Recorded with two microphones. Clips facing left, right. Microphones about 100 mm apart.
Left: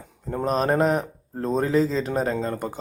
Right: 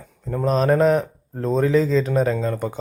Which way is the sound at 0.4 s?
5° left (ahead or behind).